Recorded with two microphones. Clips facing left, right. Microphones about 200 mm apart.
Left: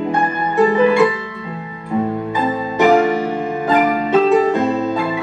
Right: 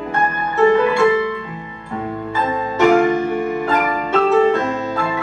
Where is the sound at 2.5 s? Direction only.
10° left (ahead or behind).